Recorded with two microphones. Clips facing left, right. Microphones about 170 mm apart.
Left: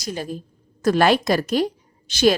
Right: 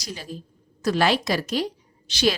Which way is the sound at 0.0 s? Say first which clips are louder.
Left 7 dB; 50° left (ahead or behind).